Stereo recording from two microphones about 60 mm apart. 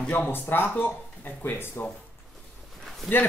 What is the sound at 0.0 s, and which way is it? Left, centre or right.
Speech, left.